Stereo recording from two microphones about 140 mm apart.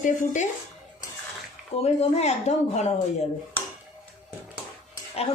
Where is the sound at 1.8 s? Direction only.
50° left (ahead or behind).